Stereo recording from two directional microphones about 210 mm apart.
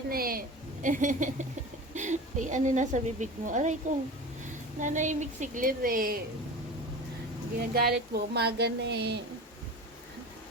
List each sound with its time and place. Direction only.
0.1 s a woman's voice: 45° right (ahead or behind)
7.6 s speech: 50° right (ahead or behind)